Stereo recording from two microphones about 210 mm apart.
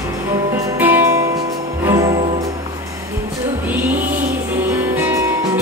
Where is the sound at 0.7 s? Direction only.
10° right (ahead or behind).